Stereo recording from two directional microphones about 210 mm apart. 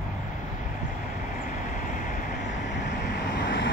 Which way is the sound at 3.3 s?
55° left (ahead or behind).